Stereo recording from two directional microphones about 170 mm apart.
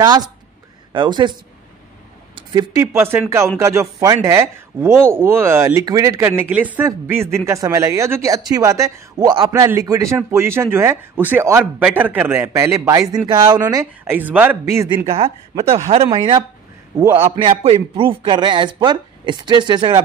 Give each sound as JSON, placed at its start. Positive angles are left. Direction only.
{"t": 0.0, "sound": "a man's voice", "side_deg": -25}
{"t": 2.3, "sound": "speech", "side_deg": -20}
{"t": 15.0, "sound": "a man's voice", "side_deg": -35}